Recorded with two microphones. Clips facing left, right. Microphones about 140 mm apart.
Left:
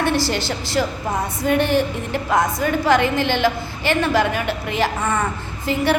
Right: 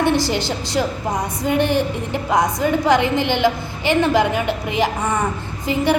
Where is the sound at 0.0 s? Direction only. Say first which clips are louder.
Right 2 dB; 20° right (ahead or behind).